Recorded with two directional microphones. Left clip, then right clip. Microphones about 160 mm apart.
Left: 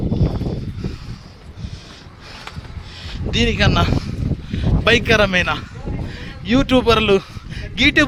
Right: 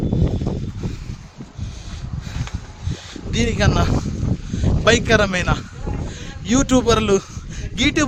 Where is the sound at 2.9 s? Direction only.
15° right (ahead or behind).